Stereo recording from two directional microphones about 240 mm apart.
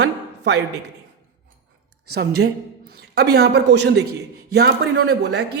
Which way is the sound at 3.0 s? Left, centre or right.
Right.